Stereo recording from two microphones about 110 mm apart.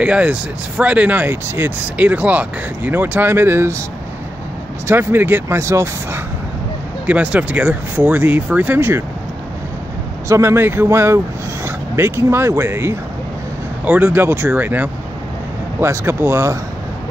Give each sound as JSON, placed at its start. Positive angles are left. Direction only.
{"t": 0.0, "sound": "speech", "side_deg": -10}
{"t": 4.8, "sound": "speech", "side_deg": -20}
{"t": 7.1, "sound": "speech", "side_deg": -10}
{"t": 10.2, "sound": "speech", "side_deg": -25}